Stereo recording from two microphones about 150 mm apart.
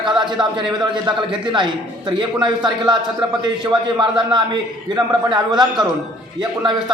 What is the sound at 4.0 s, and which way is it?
A man's voice, 30° right (ahead or behind).